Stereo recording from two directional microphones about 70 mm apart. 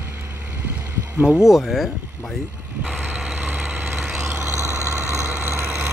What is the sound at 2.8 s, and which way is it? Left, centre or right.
Vehicle, centre.